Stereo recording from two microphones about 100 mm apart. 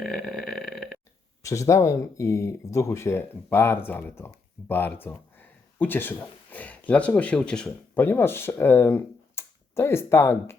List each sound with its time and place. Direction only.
0.0 s burping: centre (ahead or behind)
1.4 s speech: 30° left (ahead or behind); by 8.0 s 10° left (ahead or behind)
8.0 s speech: 20° left (ahead or behind)